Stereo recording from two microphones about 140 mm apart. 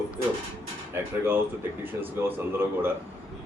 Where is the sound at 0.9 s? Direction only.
15° right (ahead or behind).